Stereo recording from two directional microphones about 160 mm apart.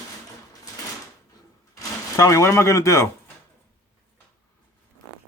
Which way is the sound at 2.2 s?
20° left (ahead or behind).